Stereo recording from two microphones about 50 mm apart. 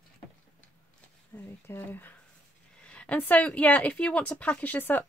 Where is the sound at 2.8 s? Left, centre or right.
Left.